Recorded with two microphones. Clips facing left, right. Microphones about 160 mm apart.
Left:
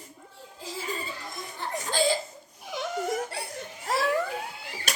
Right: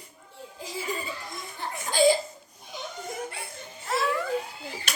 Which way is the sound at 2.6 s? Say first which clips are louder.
Left 7 dB; 85° left.